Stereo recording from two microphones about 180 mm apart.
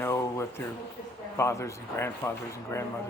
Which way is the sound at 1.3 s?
15° left (ahead or behind).